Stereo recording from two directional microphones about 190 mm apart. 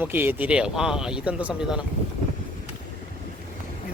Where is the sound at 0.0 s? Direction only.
10° right (ahead or behind).